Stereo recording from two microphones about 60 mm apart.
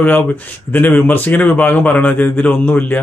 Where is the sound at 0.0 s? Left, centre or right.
Left.